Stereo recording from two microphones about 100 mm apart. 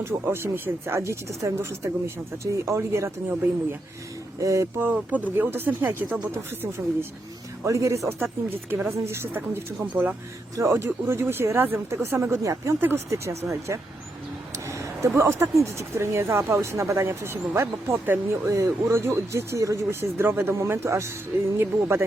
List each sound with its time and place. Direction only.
0.0 s speech: 25° right (ahead or behind)
4.8 s speech: 15° right (ahead or behind)
10.5 s speech: 30° right (ahead or behind)